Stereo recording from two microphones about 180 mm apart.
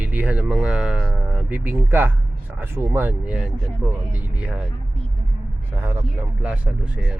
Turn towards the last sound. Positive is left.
turn(degrees=-5)  # may be behind; listen again after turning